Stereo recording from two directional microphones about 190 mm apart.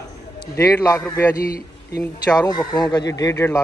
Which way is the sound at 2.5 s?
20° left (ahead or behind).